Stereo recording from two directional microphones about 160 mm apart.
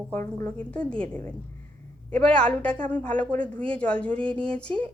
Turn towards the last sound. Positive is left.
turn(degrees=5)  # may be behind; listen again after turning